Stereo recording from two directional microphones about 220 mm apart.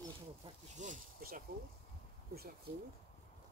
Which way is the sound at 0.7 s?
35° right (ahead or behind).